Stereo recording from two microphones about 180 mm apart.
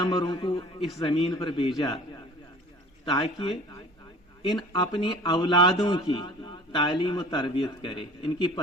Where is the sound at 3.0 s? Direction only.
25° left (ahead or behind).